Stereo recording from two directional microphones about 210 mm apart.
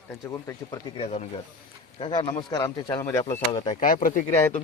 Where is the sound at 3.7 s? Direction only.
40° left (ahead or behind).